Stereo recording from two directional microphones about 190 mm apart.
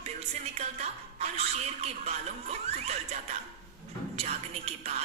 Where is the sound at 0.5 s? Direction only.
35° right (ahead or behind).